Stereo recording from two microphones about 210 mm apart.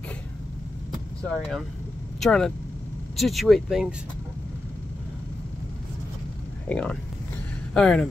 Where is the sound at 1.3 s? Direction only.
Centre (ahead or behind).